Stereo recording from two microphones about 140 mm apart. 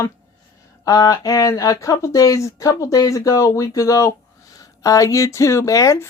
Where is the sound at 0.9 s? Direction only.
25° left (ahead or behind).